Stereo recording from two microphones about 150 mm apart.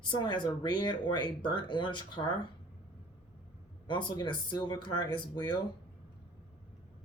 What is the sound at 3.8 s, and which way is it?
Speech, 30° left (ahead or behind).